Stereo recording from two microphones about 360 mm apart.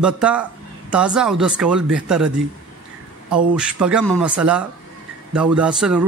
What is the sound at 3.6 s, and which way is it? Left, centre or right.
Speech, centre.